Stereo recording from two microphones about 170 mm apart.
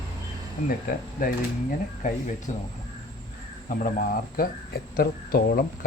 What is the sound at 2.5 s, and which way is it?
Speech, 45° left (ahead or behind).